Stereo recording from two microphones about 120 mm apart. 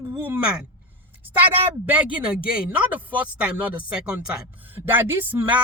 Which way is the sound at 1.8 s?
10° right (ahead or behind).